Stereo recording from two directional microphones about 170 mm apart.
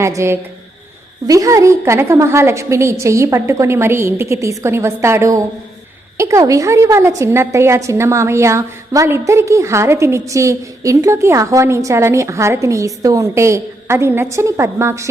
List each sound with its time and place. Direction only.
0.0 s a woman's voice: 15° right (ahead or behind)